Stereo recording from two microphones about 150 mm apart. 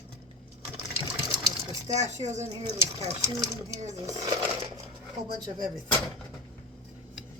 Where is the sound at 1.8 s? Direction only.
50° right (ahead or behind).